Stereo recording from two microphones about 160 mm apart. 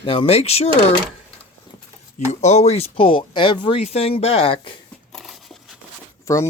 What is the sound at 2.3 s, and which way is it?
Speech, 45° left (ahead or behind).